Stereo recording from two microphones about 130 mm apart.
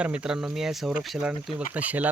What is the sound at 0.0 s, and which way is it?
Speech, 10° right (ahead or behind).